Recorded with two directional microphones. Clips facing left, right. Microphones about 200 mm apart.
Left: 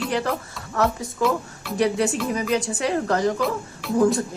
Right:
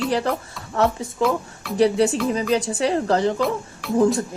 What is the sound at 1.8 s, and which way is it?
Speech, 30° right (ahead or behind).